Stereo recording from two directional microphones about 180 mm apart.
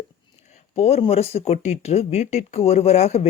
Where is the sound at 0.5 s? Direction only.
35° left (ahead or behind).